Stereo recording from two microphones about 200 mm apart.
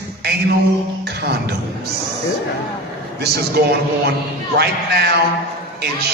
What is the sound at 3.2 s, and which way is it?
A man's voice, 50° right (ahead or behind).